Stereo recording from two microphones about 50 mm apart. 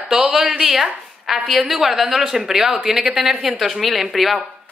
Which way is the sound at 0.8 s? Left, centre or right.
Centre.